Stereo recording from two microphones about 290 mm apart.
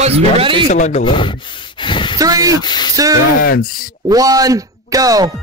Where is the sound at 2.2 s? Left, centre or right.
Centre.